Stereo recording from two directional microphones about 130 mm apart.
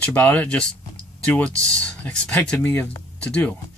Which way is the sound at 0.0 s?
10° left (ahead or behind).